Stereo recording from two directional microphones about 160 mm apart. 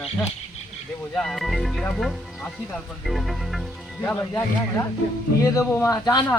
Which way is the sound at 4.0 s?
15° left (ahead or behind).